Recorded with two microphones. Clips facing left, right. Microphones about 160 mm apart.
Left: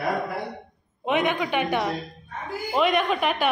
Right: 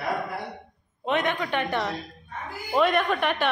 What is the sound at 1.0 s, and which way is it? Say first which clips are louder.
A woman's voice: left 2 dB; 10° left (ahead or behind).